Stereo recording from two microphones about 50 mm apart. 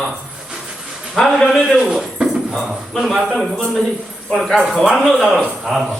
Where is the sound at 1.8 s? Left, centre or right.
Centre.